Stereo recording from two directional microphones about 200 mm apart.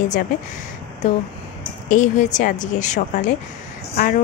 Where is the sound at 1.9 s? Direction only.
35° left (ahead or behind).